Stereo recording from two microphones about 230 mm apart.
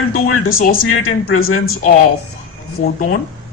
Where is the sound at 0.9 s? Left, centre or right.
Left.